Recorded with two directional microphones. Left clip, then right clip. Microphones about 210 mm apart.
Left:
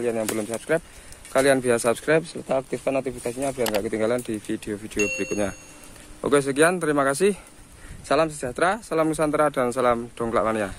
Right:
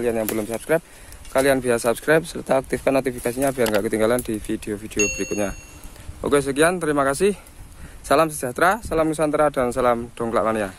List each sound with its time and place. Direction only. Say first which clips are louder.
0.0 s speech: right 3 dB; 20° right (ahead or behind)
1.3 s speech: right 1 dB; 5° right (ahead or behind)
8.4 s speech: right 4 dB; 15° right (ahead or behind)